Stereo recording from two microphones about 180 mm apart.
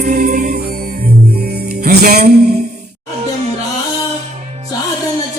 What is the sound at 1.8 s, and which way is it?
Music, 60° right (ahead or behind).